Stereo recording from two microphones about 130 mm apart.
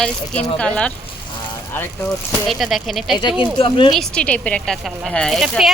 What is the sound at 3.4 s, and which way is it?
Speech, 45° left (ahead or behind).